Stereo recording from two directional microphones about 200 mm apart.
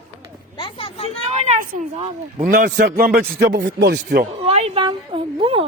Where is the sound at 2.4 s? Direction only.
45° right (ahead or behind).